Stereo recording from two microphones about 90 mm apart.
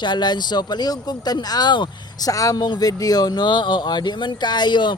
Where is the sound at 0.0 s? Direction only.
55° left (ahead or behind).